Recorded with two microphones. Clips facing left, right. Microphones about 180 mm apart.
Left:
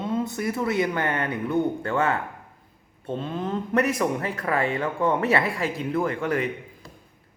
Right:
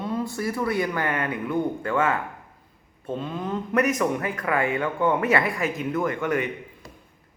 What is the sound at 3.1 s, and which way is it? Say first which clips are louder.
Speech: left 1 dB; 25° left (ahead or behind).